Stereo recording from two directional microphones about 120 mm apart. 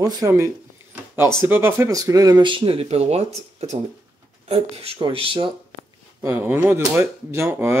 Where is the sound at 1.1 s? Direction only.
20° right (ahead or behind); by 3.3 s 60° right (ahead or behind).